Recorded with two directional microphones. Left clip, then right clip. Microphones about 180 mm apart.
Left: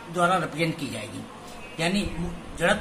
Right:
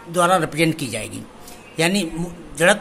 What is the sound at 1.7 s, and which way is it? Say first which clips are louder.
Speech: right 7 dB; 60° right (ahead or behind).